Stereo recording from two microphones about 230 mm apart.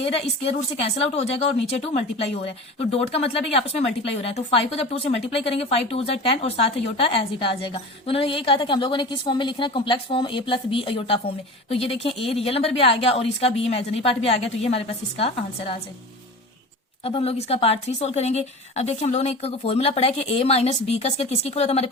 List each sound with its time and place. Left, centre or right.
0.1 s speech: left
17.0 s speech: left